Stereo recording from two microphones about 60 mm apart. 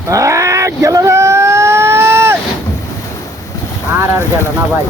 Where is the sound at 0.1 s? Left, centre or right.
Right.